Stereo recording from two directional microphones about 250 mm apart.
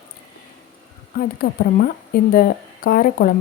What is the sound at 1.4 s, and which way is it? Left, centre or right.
A woman's voice, left.